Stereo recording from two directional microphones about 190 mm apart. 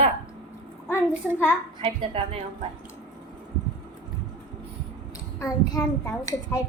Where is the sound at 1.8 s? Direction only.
30° right (ahead or behind).